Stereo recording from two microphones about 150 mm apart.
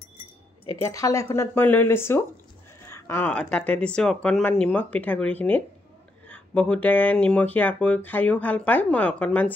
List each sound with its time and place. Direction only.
0.9 s speech: 20° left (ahead or behind)